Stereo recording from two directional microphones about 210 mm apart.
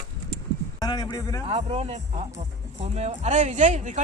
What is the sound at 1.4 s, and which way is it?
Speech, 30° right (ahead or behind).